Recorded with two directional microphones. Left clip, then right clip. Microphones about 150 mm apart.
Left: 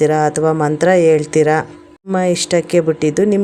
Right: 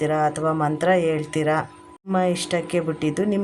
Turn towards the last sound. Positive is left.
turn(degrees=35)  # may be behind; listen again after turning